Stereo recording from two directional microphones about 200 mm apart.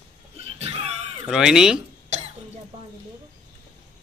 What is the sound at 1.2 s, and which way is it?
Speech, centre (ahead or behind).